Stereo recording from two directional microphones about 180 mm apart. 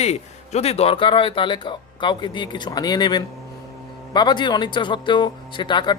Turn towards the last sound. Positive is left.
turn(degrees=25)  # may be behind; listen again after turning